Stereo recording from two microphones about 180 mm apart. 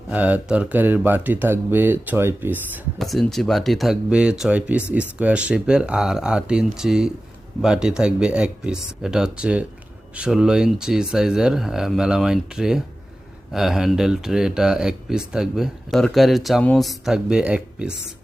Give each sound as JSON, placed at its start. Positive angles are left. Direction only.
{"t": 0.1, "sound": "speech", "side_deg": -10}
{"t": 3.0, "sound": "speech", "side_deg": 0}